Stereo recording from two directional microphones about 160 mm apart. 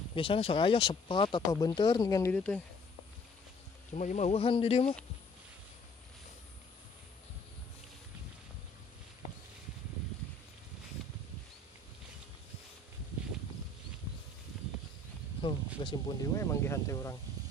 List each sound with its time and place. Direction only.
0.1 s speech: 35° left (ahead or behind)
2.3 s speech: 10° left (ahead or behind)
3.9 s speech: 45° left (ahead or behind)
15.4 s a sound: 30° left (ahead or behind)
16.3 s speech: 20° left (ahead or behind)